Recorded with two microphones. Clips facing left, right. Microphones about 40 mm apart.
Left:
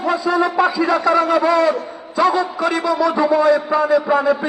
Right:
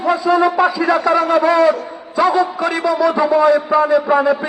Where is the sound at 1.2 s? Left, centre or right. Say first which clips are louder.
Right 1 dB; right.